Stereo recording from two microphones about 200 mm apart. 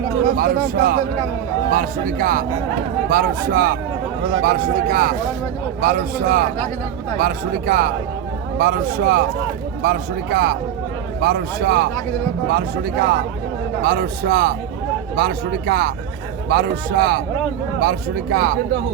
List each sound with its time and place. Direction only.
0.3 s speech: 45° right (ahead or behind)